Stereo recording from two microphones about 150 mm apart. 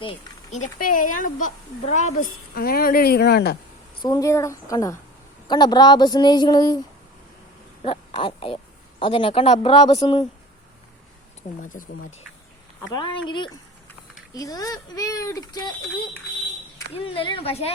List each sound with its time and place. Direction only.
0.5 s speech: 60° left (ahead or behind)
2.6 s speech: 80° left
4.0 s speech: 25° left (ahead or behind)
7.9 s speech: 35° left (ahead or behind)
11.6 s speech: 60° left (ahead or behind)
12.9 s speech: 30° left (ahead or behind)
16.9 s speech: 35° left (ahead or behind)